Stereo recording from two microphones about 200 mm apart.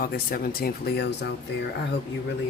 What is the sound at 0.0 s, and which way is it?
A man's voice, 45° left (ahead or behind).